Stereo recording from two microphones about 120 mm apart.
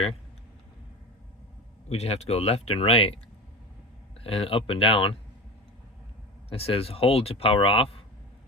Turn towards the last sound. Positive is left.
turn(degrees=50)  # may be behind; listen again after turning